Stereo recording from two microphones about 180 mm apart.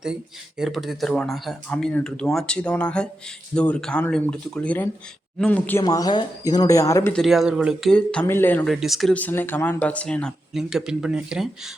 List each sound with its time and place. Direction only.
0.6 s speech: centre (ahead or behind)
5.8 s speech: 20° left (ahead or behind)
7.1 s speech: centre (ahead or behind)